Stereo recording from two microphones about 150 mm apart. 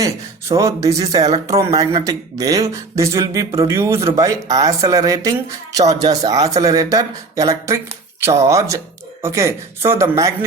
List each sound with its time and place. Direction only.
0.0 s speech: 20° right (ahead or behind)